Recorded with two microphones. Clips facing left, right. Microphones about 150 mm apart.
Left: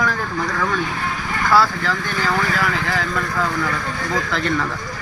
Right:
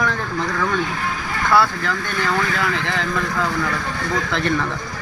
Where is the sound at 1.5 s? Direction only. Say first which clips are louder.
Left 1 dB; 20° right (ahead or behind).